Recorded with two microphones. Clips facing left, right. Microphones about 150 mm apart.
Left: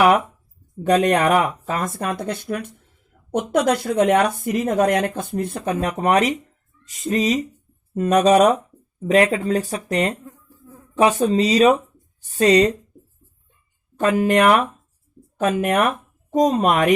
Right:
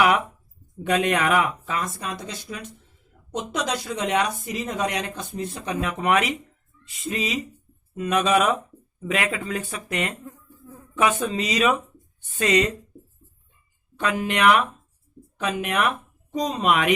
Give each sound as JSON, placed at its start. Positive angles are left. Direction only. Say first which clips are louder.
{"t": 0.9, "sound": "speech", "louder": "left 5 dB", "side_deg": 40}
{"t": 5.8, "sound": "speech", "louder": "left 4 dB", "side_deg": 40}
{"t": 13.9, "sound": "speech", "louder": "left 8 dB", "side_deg": 45}